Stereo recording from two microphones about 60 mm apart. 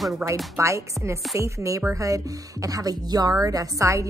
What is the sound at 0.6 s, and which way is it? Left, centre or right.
A woman's voice, right.